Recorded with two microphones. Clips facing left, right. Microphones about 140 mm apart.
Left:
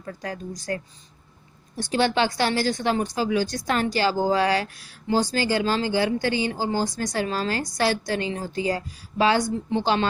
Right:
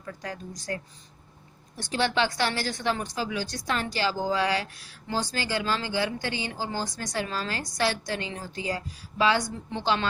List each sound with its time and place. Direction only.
0.0 s a woman's voice: 40° left (ahead or behind)
2.0 s a woman's voice: 35° left (ahead or behind)